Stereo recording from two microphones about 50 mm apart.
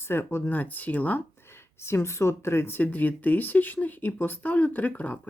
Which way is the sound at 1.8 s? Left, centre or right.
Left.